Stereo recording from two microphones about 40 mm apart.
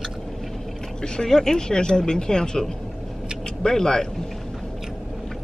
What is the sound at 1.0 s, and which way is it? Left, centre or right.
Speech, centre.